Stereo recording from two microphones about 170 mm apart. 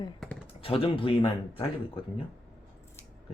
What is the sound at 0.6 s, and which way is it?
Speech, 35° left (ahead or behind).